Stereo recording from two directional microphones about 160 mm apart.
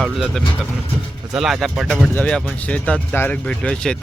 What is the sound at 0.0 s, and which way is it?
Speech, centre (ahead or behind).